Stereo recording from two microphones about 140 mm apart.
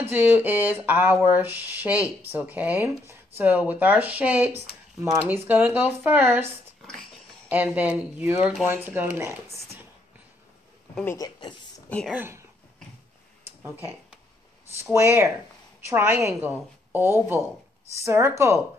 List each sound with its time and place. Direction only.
0.0 s speech: 15° right (ahead or behind)
11.1 s speech: 30° left (ahead or behind)
12.1 s speech: 15° right (ahead or behind)
14.9 s a woman's voice: 20° right (ahead or behind)